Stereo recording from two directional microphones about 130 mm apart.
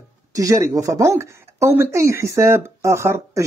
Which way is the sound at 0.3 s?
25° right (ahead or behind).